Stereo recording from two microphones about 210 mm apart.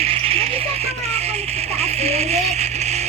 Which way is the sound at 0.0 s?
30° right (ahead or behind).